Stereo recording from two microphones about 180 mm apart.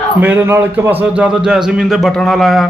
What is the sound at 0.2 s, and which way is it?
A man's voice, 10° right (ahead or behind).